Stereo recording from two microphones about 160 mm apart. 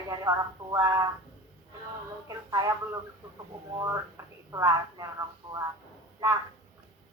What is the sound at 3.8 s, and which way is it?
Speech, 20° right (ahead or behind).